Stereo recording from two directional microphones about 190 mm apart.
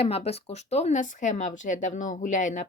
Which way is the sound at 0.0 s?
30° left (ahead or behind).